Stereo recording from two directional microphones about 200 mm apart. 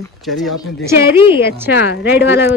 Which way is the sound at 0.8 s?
10° right (ahead or behind).